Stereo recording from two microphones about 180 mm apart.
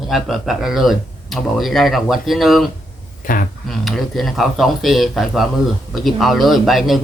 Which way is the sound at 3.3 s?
50° left (ahead or behind).